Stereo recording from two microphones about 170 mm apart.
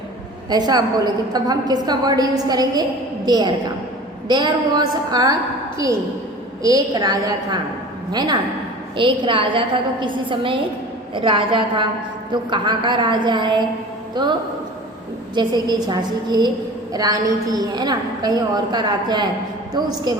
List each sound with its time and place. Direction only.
0.5 s a woman's voice: 25° right (ahead or behind)
15.4 s a woman's voice: 25° right (ahead or behind)